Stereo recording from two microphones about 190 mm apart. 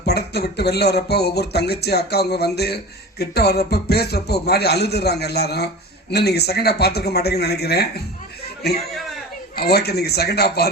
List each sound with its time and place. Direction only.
0.0 s speech: 60° left (ahead or behind)
9.6 s speech: 55° left (ahead or behind)